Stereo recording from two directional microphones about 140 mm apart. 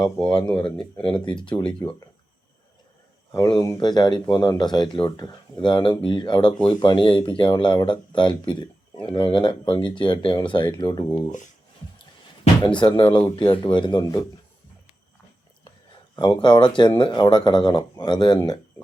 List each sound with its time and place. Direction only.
0.3 s speech: 30° left (ahead or behind)
3.3 s speech: 25° left (ahead or behind)
12.8 s speech: 35° left (ahead or behind)
16.4 s speech: 30° left (ahead or behind)